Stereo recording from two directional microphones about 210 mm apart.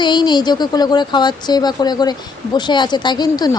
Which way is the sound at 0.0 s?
20° left (ahead or behind).